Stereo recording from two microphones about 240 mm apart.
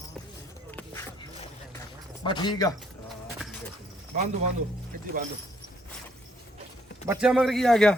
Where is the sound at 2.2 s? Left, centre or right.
Centre.